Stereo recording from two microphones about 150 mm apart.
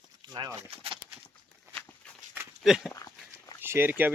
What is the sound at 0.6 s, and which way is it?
Speech, 40° right (ahead or behind).